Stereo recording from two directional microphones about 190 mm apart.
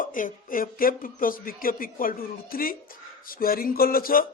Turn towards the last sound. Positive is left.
turn(degrees=50)  # may be behind; listen again after turning